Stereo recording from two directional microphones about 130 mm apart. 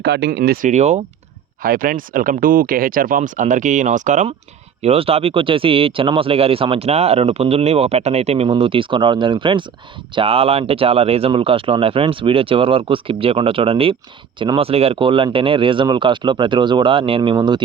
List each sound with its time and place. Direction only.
0.3 s speech: 90° right; by 1.0 s 60° right (ahead or behind)
1.6 s speech: 90° right; by 4.3 s 70° right (ahead or behind)
4.8 s speech: 50° right (ahead or behind); by 17.6 s 35° right (ahead or behind)